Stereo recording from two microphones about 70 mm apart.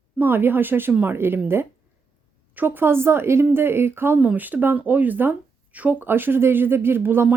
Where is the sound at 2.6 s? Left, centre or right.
Right.